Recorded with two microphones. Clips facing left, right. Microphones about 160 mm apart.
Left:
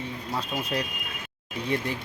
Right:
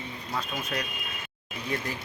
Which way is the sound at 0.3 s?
30° left (ahead or behind).